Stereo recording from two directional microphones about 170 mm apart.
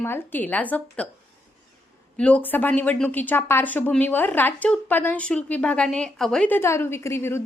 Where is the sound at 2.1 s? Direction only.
5° left (ahead or behind).